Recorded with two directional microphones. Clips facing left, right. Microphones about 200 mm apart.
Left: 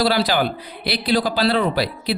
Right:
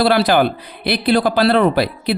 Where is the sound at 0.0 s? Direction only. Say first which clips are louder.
Right 5 dB; 55° right (ahead or behind).